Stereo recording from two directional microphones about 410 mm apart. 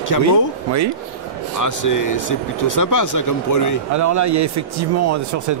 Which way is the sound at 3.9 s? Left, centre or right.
Right.